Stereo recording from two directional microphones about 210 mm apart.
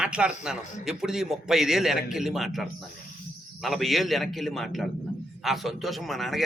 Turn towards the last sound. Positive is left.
turn(degrees=0)  # may be behind; listen again after turning